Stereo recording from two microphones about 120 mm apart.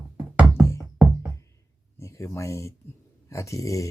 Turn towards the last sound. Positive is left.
turn(degrees=25)  # may be behind; listen again after turning